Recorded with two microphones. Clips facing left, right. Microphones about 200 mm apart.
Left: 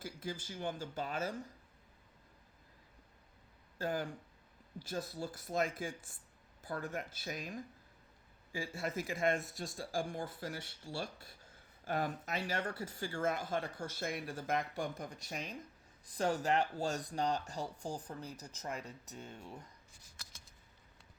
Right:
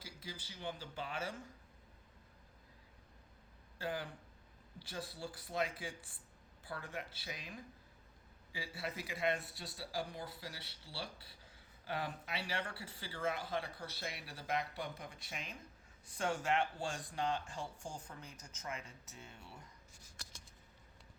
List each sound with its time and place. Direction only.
0.0 s speech: 50° left (ahead or behind)
3.8 s speech: 45° left (ahead or behind)